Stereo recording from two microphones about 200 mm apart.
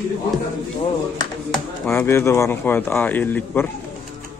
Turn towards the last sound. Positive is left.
turn(degrees=10)  # may be behind; listen again after turning